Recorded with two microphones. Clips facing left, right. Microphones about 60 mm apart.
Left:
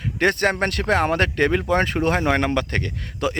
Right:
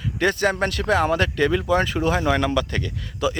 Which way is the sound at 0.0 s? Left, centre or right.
Left.